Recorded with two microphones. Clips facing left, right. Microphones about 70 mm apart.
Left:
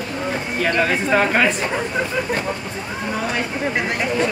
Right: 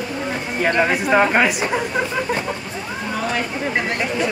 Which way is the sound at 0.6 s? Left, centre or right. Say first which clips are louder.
Right 2 dB; centre.